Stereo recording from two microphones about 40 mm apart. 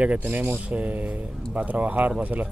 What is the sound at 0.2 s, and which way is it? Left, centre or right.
Speech, right.